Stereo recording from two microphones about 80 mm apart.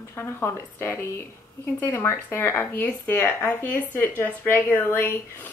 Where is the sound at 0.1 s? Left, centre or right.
Left.